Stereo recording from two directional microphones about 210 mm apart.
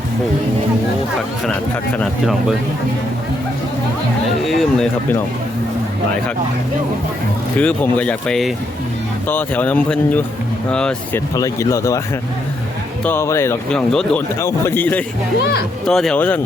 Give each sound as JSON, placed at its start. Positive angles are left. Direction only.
{"t": 2.0, "sound": "speech", "side_deg": 0}
{"t": 4.4, "sound": "speech", "side_deg": 0}
{"t": 7.6, "sound": "speech", "side_deg": 5}
{"t": 11.3, "sound": "speech", "side_deg": 15}
{"t": 13.1, "sound": "speech", "side_deg": 10}
{"t": 15.4, "sound": "speech", "side_deg": 50}
{"t": 15.9, "sound": "speech", "side_deg": 0}